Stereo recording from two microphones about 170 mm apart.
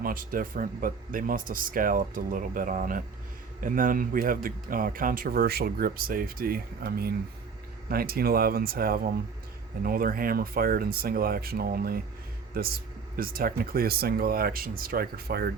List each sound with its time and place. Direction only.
0.0 s speech: 55° right (ahead or behind)